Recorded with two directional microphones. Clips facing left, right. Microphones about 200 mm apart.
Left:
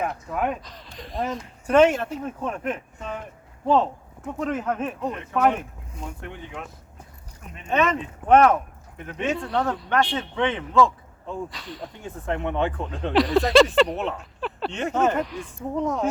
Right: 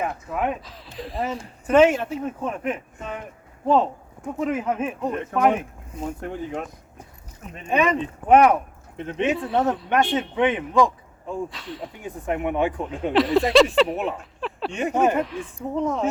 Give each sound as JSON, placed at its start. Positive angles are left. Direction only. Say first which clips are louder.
{"t": 0.0, "sound": "speech", "louder": "right 1 dB", "side_deg": -5}
{"t": 6.0, "sound": "speech", "louder": "right 7 dB", "side_deg": -40}
{"t": 7.7, "sound": "speech", "louder": "right 2 dB", "side_deg": -10}
{"t": 9.0, "sound": "a man's voice", "louder": "right 3 dB", "side_deg": -25}
{"t": 11.4, "sound": "speech", "louder": "right 2 dB", "side_deg": 0}
{"t": 12.0, "sound": "speech", "louder": "right 2 dB", "side_deg": -15}
{"t": 15.2, "sound": "speech", "louder": "right 2 dB", "side_deg": 0}